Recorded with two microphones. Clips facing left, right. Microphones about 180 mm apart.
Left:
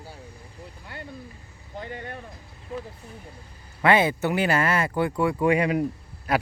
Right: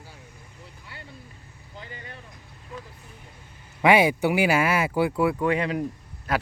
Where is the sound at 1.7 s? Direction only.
50° left (ahead or behind).